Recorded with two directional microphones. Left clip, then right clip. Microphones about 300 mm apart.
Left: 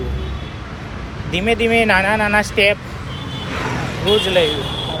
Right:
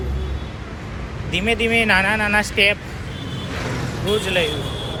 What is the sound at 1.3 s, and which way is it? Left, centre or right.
Speech, centre.